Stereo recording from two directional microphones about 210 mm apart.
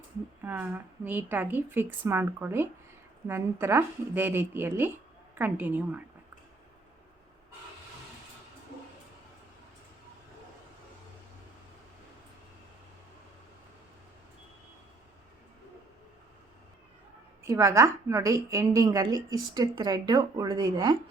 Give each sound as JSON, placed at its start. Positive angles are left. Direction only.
{"t": 0.4, "sound": "a woman's voice", "side_deg": -10}
{"t": 17.4, "sound": "a woman's voice", "side_deg": -15}